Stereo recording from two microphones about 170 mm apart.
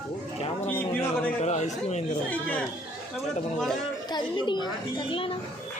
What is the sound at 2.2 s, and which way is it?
Speech, 10° left (ahead or behind).